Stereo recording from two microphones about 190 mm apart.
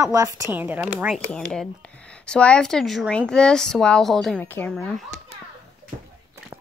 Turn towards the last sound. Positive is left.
turn(degrees=5)  # may be behind; listen again after turning